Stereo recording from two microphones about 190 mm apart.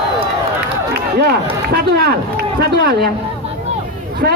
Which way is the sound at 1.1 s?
55° right (ahead or behind).